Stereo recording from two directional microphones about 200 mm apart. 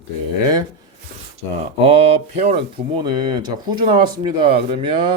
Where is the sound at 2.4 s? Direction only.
30° right (ahead or behind).